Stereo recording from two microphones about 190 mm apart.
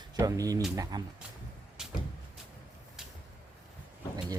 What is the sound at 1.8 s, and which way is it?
Vehicle, 5° right (ahead or behind).